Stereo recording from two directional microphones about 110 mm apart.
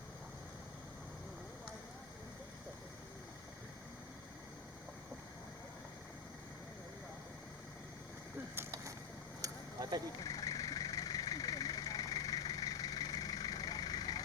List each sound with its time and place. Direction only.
8.5 s vehicle: 25° right (ahead or behind)
9.4 s vehicle: 35° right (ahead or behind)
10.2 s vehicle: 30° left (ahead or behind)